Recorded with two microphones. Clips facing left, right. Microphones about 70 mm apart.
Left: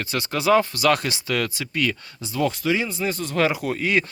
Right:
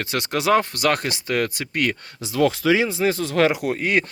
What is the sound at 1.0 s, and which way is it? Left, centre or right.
Speech, right.